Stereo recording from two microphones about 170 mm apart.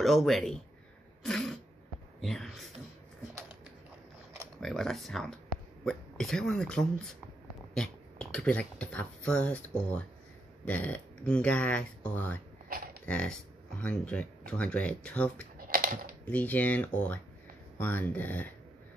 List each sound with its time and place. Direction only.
0.0 s speech: centre (ahead or behind)
4.6 s speech: centre (ahead or behind)
12.6 s a sound: 60° right (ahead or behind)
13.0 s speech: 5° left (ahead or behind)
15.5 s typing: 55° right (ahead or behind)
16.3 s speech: 10° left (ahead or behind)